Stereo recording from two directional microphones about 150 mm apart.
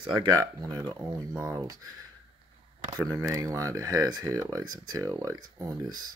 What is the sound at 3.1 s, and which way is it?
Speech, 20° right (ahead or behind).